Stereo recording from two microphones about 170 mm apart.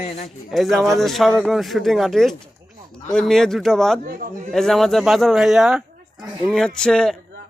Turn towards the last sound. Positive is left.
turn(degrees=5)  # may be behind; listen again after turning